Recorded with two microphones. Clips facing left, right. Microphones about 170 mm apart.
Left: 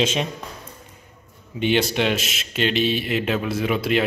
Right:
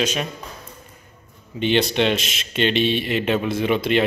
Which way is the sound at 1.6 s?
10° left (ahead or behind).